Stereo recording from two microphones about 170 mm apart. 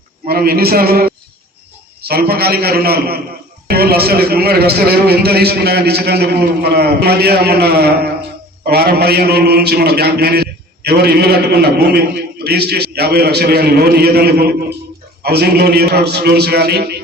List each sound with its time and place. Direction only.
0.3 s a man's voice: 65° right (ahead or behind)